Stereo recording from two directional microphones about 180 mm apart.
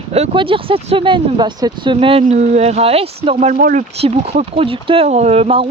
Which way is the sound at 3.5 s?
55° right (ahead or behind).